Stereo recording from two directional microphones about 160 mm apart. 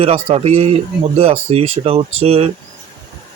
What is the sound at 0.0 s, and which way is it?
Speech, 40° right (ahead or behind).